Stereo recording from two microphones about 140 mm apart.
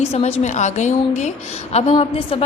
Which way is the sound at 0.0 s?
50° left (ahead or behind).